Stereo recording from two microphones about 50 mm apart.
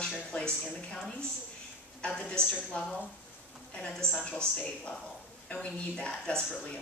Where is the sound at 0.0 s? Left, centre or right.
Left.